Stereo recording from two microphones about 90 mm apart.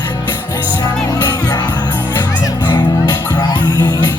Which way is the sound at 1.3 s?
50° left (ahead or behind).